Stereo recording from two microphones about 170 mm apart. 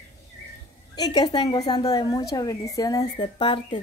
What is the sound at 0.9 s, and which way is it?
A woman's voice, 25° left (ahead or behind).